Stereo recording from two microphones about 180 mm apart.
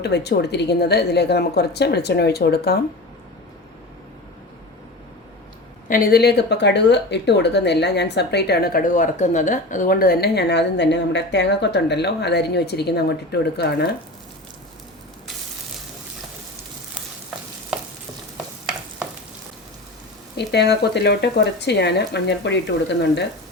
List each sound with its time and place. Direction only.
0.0 s a woman's voice: 65° left (ahead or behind)
5.9 s speech: 60° left (ahead or behind)
20.5 s speech: 70° left (ahead or behind)